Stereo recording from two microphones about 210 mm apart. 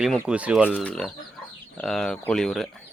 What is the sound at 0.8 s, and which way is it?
Speech, 5° left (ahead or behind).